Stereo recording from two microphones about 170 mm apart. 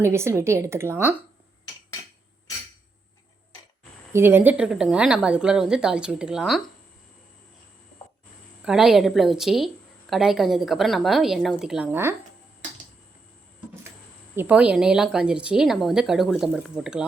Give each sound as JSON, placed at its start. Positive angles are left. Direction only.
{"t": 0.0, "sound": "a woman's voice", "side_deg": -15}
{"t": 4.1, "sound": "speech", "side_deg": -15}
{"t": 8.6, "sound": "speech", "side_deg": -5}
{"t": 14.3, "sound": "speech", "side_deg": -10}